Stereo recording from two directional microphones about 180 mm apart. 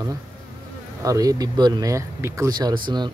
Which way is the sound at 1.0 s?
20° right (ahead or behind).